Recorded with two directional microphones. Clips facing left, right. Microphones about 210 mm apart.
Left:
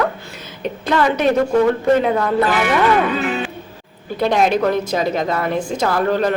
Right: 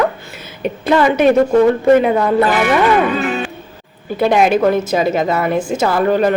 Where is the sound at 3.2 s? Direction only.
45° right (ahead or behind).